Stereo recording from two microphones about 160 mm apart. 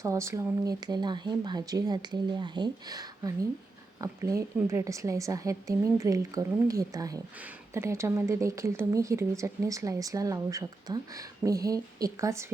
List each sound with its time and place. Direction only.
0.0 s speech: 20° right (ahead or behind)